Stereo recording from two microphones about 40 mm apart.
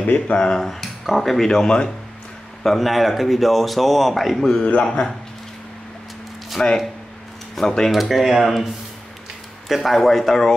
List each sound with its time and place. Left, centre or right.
0.0 s speech: left
0.4 s speech: centre
0.7 s speech: centre
1.5 s speech: centre
2.6 s speech: centre
4.8 s speech: centre
6.6 s speech: left
7.9 s speech: centre
9.7 s speech: centre